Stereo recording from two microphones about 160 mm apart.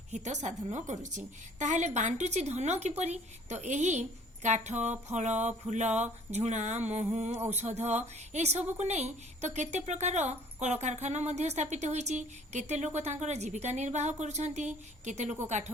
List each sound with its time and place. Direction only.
0.1 s speech: 45° right (ahead or behind)